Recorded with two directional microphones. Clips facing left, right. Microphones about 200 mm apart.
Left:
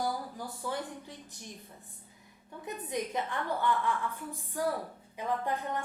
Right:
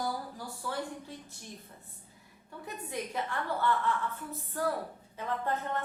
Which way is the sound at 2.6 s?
20° left (ahead or behind).